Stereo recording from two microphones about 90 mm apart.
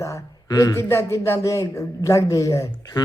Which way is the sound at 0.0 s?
35° left (ahead or behind).